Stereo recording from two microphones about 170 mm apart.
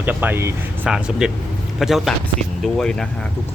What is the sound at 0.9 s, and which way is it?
Speech, 5° right (ahead or behind).